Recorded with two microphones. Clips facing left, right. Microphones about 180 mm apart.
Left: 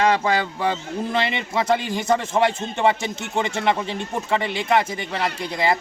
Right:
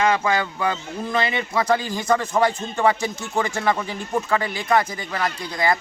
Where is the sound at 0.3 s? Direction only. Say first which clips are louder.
Left 1 dB; 30° left (ahead or behind).